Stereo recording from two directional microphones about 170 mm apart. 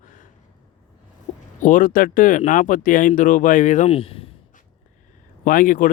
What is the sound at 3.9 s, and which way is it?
Speech, 35° left (ahead or behind).